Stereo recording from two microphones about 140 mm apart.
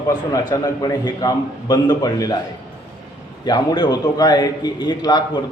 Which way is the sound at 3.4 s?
30° left (ahead or behind).